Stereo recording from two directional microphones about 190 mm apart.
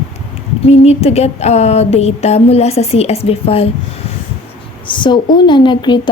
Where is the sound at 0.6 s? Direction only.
35° left (ahead or behind).